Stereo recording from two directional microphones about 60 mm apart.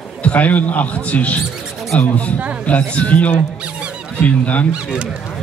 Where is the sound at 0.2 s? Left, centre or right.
Left.